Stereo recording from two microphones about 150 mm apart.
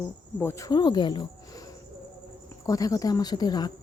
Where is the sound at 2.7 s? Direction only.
25° left (ahead or behind).